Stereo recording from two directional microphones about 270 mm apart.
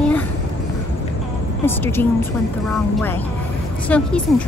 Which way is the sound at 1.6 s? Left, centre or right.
Centre.